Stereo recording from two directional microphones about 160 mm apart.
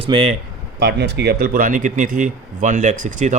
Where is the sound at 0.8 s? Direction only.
90° right.